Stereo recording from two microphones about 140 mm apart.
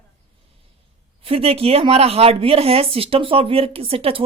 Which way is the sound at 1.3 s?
45° right (ahead or behind).